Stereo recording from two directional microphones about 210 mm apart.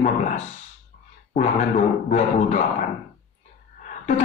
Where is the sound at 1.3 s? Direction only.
35° left (ahead or behind).